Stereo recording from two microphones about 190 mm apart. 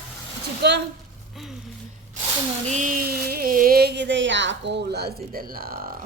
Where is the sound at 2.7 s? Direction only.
45° right (ahead or behind).